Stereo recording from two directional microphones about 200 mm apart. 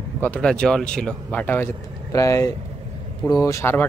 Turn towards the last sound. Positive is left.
turn(degrees=15)  # may be behind; listen again after turning